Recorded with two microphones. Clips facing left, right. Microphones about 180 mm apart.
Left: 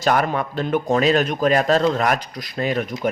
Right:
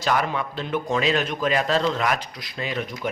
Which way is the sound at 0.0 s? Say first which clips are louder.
Left 4 dB; 50° left (ahead or behind).